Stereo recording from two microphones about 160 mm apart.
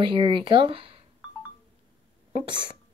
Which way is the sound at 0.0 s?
30° right (ahead or behind).